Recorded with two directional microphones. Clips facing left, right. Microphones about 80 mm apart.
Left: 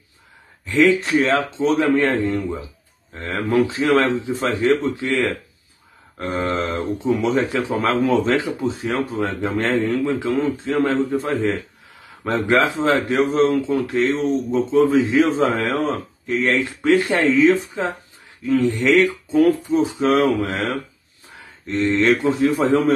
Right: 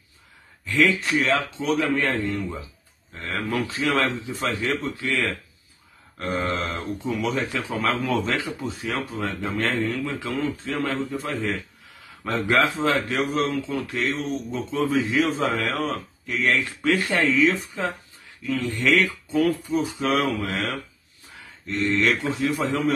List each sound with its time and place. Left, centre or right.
0.7 s a man's voice: left
1.1 s a man's voice: left
21.8 s a man's voice: left
22.1 s a man's voice: left